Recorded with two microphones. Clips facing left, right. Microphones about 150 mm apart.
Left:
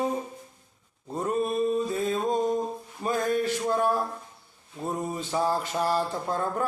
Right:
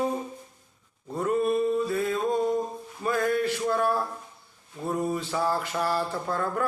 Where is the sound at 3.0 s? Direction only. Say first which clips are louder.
Right 1 dB; 20° left (ahead or behind).